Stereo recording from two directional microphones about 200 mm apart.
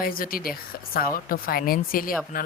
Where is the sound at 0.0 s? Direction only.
45° left (ahead or behind).